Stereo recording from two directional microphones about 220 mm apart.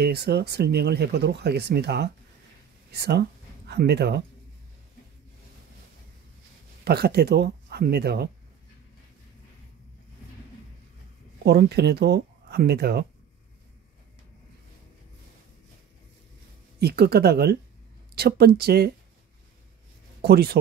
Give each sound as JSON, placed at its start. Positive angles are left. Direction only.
{"t": 0.0, "sound": "speech", "side_deg": -45}
{"t": 6.8, "sound": "speech", "side_deg": -45}
{"t": 11.4, "sound": "speech", "side_deg": -50}
{"t": 16.8, "sound": "speech", "side_deg": -45}
{"t": 20.2, "sound": "speech", "side_deg": -45}